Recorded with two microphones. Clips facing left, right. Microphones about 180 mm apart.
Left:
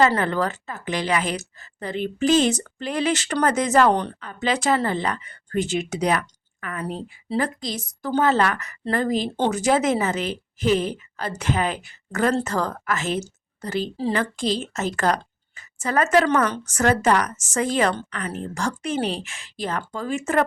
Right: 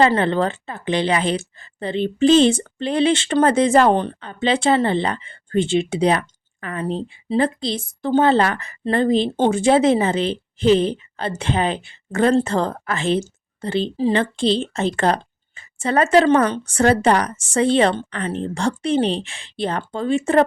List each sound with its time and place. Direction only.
0.0 s a woman's voice: 25° right (ahead or behind)